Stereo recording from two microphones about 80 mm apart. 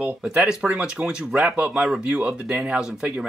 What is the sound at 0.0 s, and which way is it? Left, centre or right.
Speech, centre.